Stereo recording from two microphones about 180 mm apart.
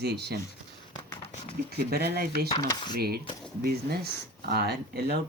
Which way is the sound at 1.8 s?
55° right (ahead or behind).